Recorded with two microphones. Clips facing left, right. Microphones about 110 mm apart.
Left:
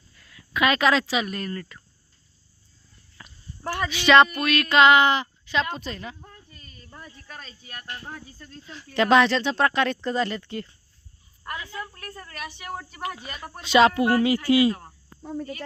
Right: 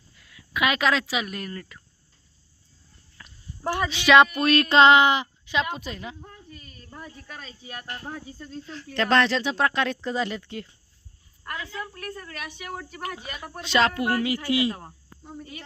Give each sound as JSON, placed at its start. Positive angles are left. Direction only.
{"t": 0.2, "sound": "speech", "side_deg": -5}
{"t": 3.2, "sound": "a sound", "side_deg": 10}
{"t": 3.6, "sound": "a sound", "side_deg": -15}
{"t": 4.0, "sound": "speech", "side_deg": -5}
{"t": 4.4, "sound": "music", "side_deg": -30}
{"t": 5.0, "sound": "speech", "side_deg": -15}
{"t": 7.6, "sound": "music", "side_deg": -20}
{"t": 8.6, "sound": "a woman's voice", "side_deg": 10}
{"t": 11.9, "sound": "speech", "side_deg": -5}
{"t": 13.7, "sound": "speech", "side_deg": 20}
{"t": 14.3, "sound": "music", "side_deg": -20}